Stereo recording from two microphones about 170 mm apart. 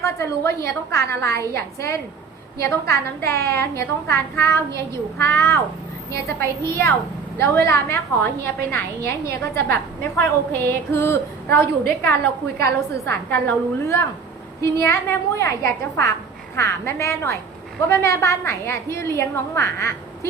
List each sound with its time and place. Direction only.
0.0 s a woman's voice: 15° left (ahead or behind)